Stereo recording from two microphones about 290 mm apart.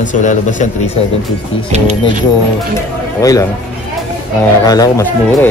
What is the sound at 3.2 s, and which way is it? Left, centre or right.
Speech, centre.